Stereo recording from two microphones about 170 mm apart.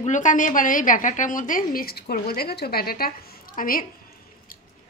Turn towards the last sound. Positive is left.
turn(degrees=55)  # may be behind; listen again after turning